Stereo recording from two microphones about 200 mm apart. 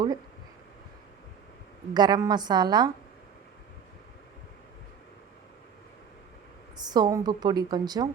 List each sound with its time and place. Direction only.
1.9 s a woman's voice: 20° right (ahead or behind)
6.7 s a woman's voice: 20° right (ahead or behind)